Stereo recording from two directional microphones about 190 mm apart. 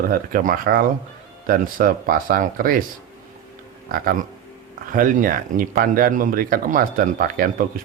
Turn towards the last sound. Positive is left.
turn(degrees=-50)  # may be behind; listen again after turning